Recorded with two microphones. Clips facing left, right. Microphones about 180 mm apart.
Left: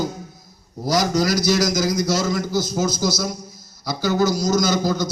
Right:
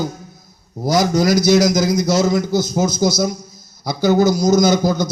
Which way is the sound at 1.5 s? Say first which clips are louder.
Right 6 dB; 60° right (ahead or behind).